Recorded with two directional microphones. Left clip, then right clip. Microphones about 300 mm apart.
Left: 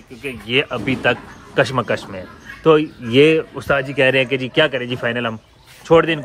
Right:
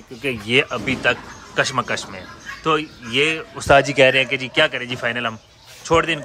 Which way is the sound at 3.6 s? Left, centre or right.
Centre.